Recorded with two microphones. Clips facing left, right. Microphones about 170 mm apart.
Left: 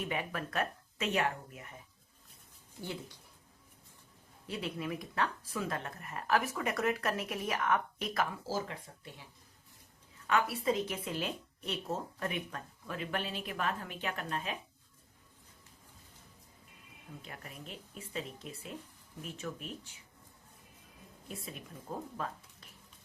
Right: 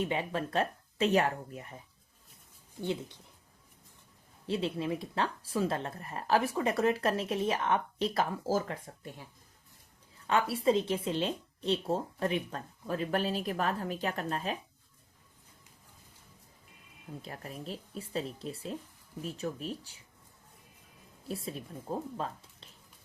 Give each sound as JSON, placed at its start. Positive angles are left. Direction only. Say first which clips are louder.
{"t": 0.0, "sound": "speech", "louder": "right 5 dB", "side_deg": -25}
{"t": 4.4, "sound": "speech", "louder": "right 6 dB", "side_deg": -30}
{"t": 8.4, "sound": "speech", "louder": "right 6 dB", "side_deg": -45}
{"t": 10.2, "sound": "speech", "louder": "right 3 dB", "side_deg": -30}
{"t": 17.2, "sound": "speech", "louder": "right 7 dB", "side_deg": -35}
{"t": 21.2, "sound": "speech", "louder": "right 7 dB", "side_deg": -35}